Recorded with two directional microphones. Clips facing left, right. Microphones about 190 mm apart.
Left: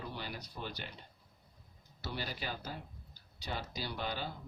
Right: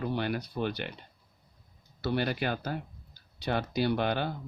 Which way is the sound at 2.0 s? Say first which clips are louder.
Right 12 dB; 65° right (ahead or behind).